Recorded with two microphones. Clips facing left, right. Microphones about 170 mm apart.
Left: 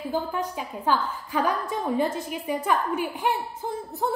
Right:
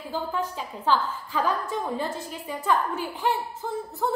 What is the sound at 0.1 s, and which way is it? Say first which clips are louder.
A woman's voice: even; 15° left (ahead or behind).